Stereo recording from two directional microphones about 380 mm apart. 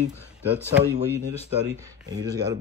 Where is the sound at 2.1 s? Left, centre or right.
Centre.